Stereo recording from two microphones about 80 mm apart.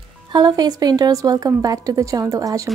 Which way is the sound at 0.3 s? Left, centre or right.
Right.